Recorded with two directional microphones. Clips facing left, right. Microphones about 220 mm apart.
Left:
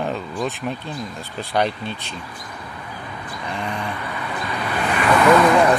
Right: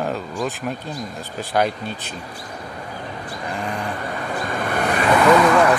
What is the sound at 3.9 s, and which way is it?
Vehicle, 45° right (ahead or behind).